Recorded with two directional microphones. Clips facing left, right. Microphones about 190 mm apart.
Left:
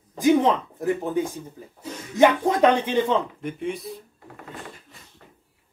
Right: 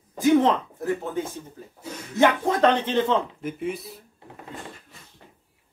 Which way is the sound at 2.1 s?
10° left (ahead or behind).